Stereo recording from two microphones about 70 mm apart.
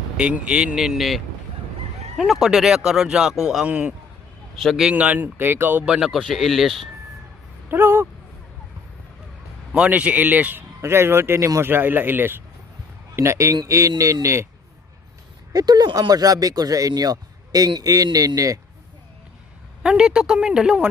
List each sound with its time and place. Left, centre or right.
0.2 s speech: centre
3.6 s speech: right
4.6 s speech: centre
4.8 s speech: centre
5.9 s speech: centre
7.7 s speech: right
9.8 s speech: centre
10.8 s speech: right
11.6 s speech: right
13.1 s speech: right
13.7 s a sound: right
14.2 s speech: right
15.5 s speech: right
19.8 s speech: centre